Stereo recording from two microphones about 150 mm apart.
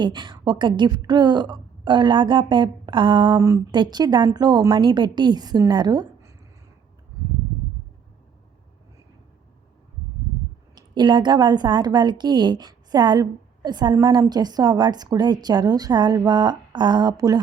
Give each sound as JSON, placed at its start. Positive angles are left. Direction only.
{"t": 0.0, "sound": "a woman's voice", "side_deg": -30}
{"t": 10.8, "sound": "a woman's voice", "side_deg": -30}